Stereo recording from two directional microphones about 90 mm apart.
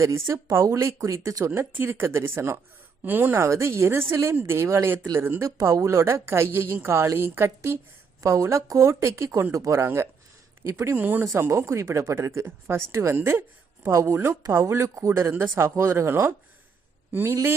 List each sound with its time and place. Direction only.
0.0 s speech: 30° right (ahead or behind)
1.5 s a woman's voice: 25° right (ahead or behind)
10.9 s a woman's voice: 20° right (ahead or behind)